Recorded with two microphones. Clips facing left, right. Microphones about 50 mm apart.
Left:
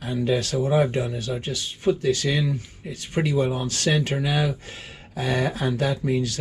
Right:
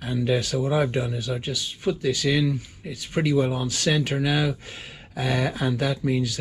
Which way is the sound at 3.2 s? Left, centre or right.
Centre.